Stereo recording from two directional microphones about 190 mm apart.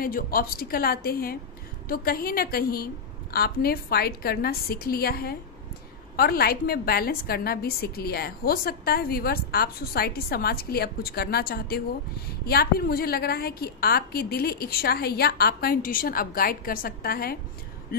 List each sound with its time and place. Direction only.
0.0 s a woman's voice: 50° left (ahead or behind)